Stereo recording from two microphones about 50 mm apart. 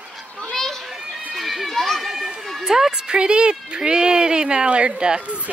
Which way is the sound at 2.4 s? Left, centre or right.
Centre.